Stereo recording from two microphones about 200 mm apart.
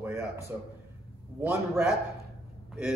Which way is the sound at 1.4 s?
5° right (ahead or behind).